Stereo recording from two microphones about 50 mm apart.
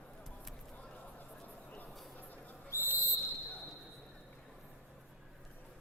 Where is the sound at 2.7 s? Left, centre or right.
Left.